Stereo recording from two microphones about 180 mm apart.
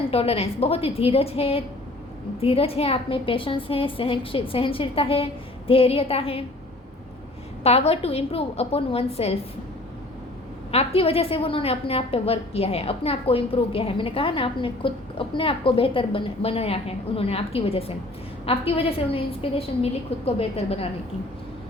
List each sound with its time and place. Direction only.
0.1 s a woman's voice: 35° left (ahead or behind)
7.6 s a woman's voice: 35° left (ahead or behind)
10.7 s a woman's voice: 35° left (ahead or behind)